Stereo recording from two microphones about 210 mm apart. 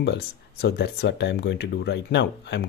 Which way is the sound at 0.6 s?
50° left (ahead or behind).